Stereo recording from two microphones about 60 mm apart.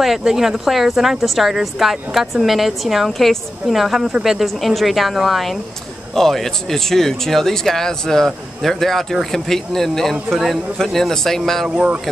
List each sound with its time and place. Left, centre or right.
0.0 s speech: centre
11.7 s speech: centre